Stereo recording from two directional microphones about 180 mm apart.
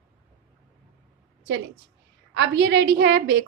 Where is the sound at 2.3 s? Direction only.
85° right; by 3.4 s 65° right (ahead or behind).